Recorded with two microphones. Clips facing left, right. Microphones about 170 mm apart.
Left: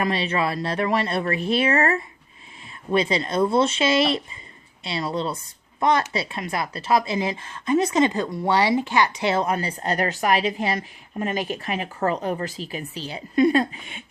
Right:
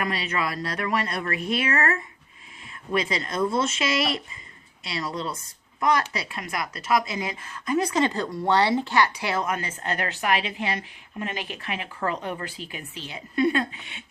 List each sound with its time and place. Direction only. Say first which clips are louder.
0.0 s a woman's voice: left 4 dB; 30° left (ahead or behind); by 14.0 s 45° left (ahead or behind)